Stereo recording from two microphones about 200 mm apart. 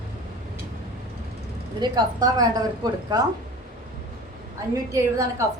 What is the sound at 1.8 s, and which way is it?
A woman's voice, 20° right (ahead or behind).